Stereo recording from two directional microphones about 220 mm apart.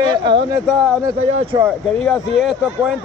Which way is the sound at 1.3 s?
30° right (ahead or behind).